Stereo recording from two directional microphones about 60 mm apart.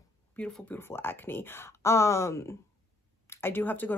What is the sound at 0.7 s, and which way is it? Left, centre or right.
Speech, left.